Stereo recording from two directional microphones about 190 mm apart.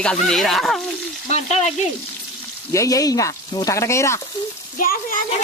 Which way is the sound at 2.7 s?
15° left (ahead or behind).